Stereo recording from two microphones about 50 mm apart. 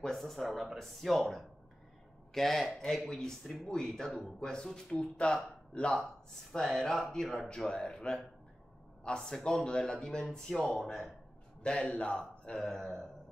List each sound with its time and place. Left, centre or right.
0.0 s speech: centre
5.0 s speech: left
6.5 s speech: centre
7.4 s speech: centre
11.6 s speech: centre
12.5 s speech: centre